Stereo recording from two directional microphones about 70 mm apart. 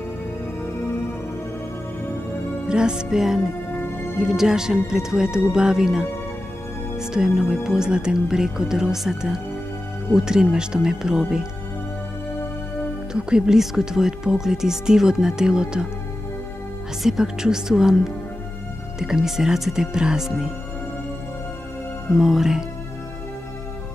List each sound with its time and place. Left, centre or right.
2.7 s speech: centre
3.7 s music: left
4.2 s speech: centre
13.1 s speech: centre
17.0 s speech: centre
22.1 s speech: centre